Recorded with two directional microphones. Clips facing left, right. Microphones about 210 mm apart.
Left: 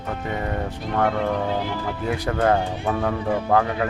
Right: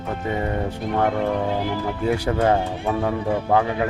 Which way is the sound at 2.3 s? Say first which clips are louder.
Even; 20° right (ahead or behind).